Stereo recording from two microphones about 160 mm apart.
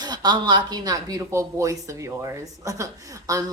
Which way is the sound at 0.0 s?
25° right (ahead or behind).